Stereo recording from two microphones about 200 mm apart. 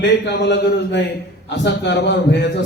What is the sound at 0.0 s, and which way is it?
A man's voice, 60° left (ahead or behind).